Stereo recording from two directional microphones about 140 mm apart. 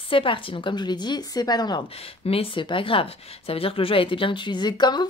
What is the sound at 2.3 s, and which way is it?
Speech, 40° left (ahead or behind).